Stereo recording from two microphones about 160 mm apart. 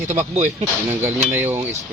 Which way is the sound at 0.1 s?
50° right (ahead or behind).